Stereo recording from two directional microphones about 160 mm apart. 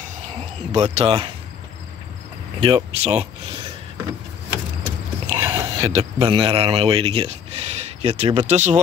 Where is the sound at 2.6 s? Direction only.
35° right (ahead or behind).